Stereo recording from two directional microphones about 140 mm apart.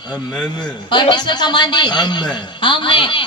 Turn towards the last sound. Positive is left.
turn(degrees=35)  # may be behind; listen again after turning